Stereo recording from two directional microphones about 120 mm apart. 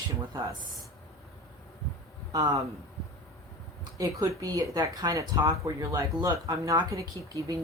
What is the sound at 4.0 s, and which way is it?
Speech, 25° right (ahead or behind).